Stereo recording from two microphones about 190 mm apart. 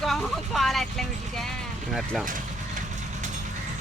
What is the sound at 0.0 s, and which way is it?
Vehicle, centre (ahead or behind).